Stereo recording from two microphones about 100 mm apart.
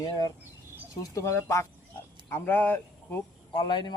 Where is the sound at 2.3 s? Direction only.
20° left (ahead or behind).